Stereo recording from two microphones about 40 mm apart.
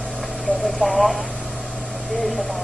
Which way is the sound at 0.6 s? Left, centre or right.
Centre.